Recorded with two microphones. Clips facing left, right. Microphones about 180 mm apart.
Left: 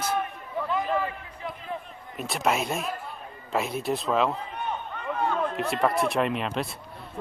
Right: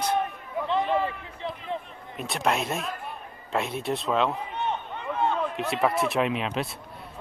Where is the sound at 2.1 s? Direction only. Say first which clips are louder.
Even; centre (ahead or behind).